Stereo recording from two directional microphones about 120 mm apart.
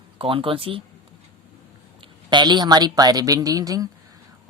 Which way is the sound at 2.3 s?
40° right (ahead or behind).